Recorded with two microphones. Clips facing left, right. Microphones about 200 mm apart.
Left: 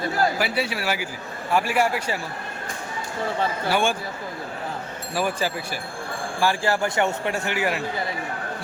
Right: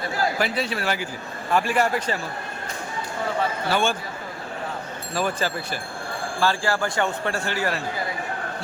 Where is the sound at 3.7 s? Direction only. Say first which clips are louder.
Even; 15° left (ahead or behind).